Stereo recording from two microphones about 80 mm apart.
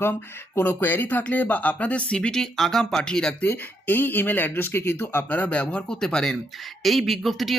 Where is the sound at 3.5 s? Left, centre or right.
Left.